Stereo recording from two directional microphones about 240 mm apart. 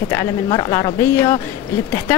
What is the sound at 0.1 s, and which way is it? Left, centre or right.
Speech, centre.